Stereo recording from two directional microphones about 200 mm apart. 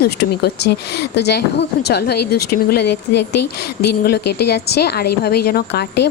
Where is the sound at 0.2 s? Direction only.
55° left (ahead or behind).